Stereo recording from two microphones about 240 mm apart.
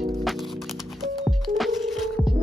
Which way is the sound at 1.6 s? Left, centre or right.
Centre.